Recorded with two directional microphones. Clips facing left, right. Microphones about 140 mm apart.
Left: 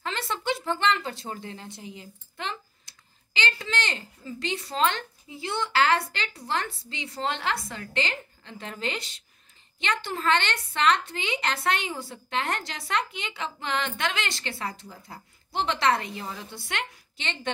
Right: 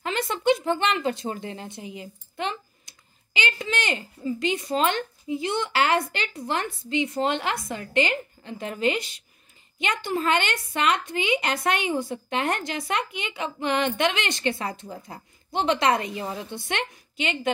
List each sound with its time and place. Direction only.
0.0 s a woman's voice: 15° right (ahead or behind)